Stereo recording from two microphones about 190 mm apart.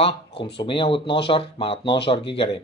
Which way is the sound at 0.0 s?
30° left (ahead or behind).